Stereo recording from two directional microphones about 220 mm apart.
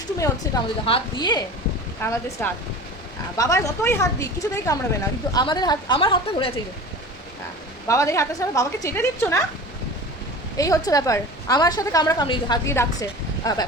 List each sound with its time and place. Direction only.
0.2 s a woman's voice: 20° left (ahead or behind)
2.0 s a woman's voice: 10° left (ahead or behind)
7.9 s a woman's voice: 15° left (ahead or behind)
10.6 s a woman's voice: 15° left (ahead or behind)